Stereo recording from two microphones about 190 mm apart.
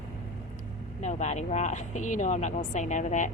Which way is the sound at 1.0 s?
35° left (ahead or behind).